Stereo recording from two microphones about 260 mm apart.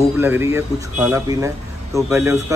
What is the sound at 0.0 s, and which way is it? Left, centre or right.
Speech, centre.